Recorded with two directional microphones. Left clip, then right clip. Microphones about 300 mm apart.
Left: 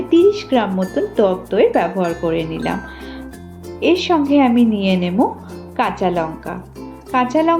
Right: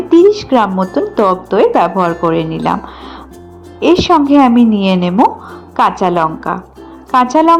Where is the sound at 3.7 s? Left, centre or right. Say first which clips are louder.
Right 6 dB; centre.